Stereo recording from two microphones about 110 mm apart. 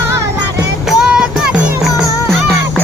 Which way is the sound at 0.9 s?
5° right (ahead or behind).